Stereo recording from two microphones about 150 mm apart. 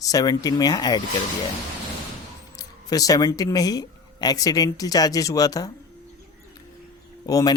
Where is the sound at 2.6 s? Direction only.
25° left (ahead or behind).